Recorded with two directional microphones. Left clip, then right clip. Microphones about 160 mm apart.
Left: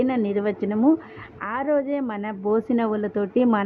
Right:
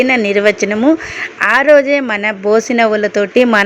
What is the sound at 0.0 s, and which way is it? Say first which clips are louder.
Speech: right 13 dB; 20° right (ahead or behind).